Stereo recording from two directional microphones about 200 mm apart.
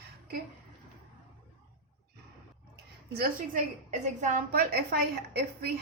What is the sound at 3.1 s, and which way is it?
A woman's voice, 45° right (ahead or behind).